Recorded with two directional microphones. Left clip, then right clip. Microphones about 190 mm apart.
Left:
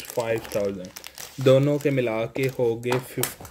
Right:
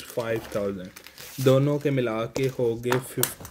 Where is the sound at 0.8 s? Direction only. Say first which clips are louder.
Left 4 dB; 35° left (ahead or behind).